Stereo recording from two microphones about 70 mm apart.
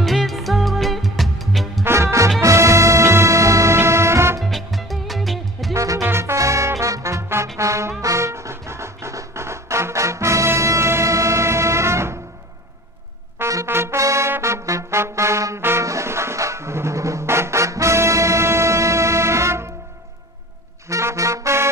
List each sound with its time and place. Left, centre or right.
0.0 s music: centre
1.9 s music: right
4.4 s music: centre
5.7 s music: right
13.4 s trumpet: right
13.7 s trumpet: right
14.4 s trombone: right
20.9 s music: right